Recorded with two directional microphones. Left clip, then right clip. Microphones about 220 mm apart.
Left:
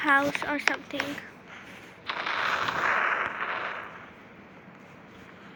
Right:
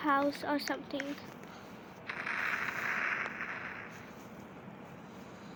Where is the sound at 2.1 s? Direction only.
35° left (ahead or behind).